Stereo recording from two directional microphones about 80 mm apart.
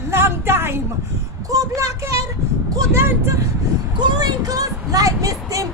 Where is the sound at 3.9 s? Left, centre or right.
Right.